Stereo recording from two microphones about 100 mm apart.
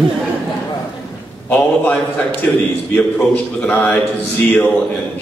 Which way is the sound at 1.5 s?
15° left (ahead or behind).